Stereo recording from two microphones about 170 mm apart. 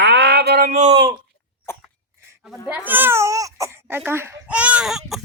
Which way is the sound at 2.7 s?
10° right (ahead or behind).